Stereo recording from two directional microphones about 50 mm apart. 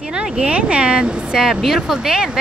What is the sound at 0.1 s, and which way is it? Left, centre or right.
Speech, right.